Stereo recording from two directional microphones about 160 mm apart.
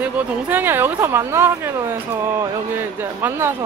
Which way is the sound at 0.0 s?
10° right (ahead or behind).